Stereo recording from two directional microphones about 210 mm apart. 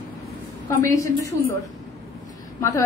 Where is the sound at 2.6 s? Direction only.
15° left (ahead or behind).